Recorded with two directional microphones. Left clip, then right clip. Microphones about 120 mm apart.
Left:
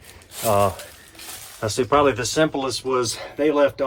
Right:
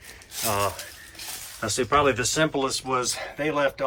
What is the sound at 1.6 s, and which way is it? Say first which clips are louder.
Speech: left 4 dB; 45° left (ahead or behind).